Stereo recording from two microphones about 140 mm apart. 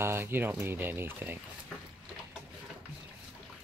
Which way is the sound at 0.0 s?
15° right (ahead or behind).